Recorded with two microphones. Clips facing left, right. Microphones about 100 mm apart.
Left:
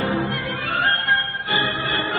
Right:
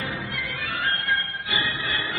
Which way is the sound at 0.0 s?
50° left (ahead or behind).